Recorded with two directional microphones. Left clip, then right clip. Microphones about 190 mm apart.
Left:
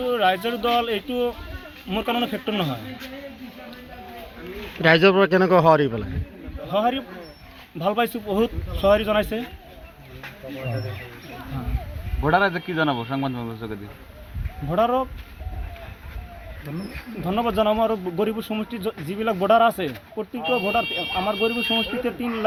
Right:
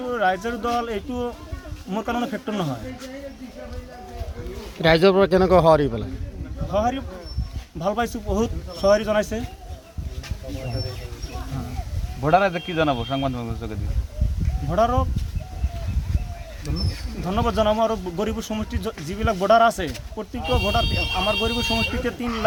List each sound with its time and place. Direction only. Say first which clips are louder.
0.0 s speech: left 2 dB; 5° right (ahead or behind)
4.8 s speech: even; 15° right (ahead or behind)
6.7 s speech: left 1 dB; centre (ahead or behind)
12.2 s a man's voice: right 1 dB; 35° right (ahead or behind)
14.7 s speech: even; 5° right (ahead or behind)
17.2 s speech: even; 10° right (ahead or behind)